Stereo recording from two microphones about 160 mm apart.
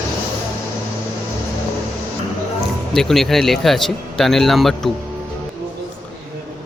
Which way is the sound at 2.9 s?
Centre (ahead or behind).